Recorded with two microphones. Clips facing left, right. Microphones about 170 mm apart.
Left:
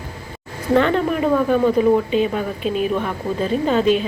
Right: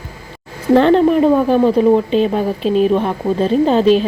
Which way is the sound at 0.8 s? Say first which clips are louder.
Right 7 dB; 30° right (ahead or behind).